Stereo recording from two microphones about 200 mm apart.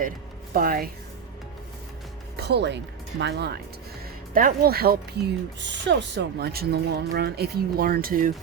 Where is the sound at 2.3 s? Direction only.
55° right (ahead or behind).